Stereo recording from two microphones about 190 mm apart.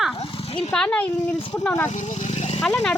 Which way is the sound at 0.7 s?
5° left (ahead or behind).